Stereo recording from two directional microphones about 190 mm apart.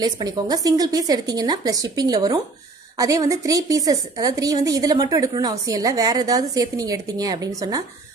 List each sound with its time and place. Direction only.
0.0 s a woman's voice: 20° right (ahead or behind)